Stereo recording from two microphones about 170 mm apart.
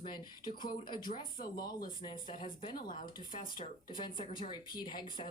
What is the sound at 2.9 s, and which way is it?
Speech, 50° left (ahead or behind).